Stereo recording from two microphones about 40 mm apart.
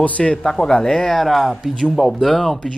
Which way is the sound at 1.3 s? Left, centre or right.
Centre.